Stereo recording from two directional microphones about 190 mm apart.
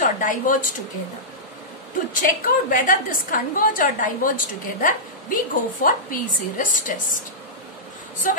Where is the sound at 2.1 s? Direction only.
45° left (ahead or behind).